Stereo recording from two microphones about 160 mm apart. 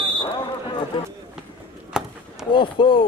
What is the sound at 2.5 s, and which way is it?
Speech, 30° left (ahead or behind).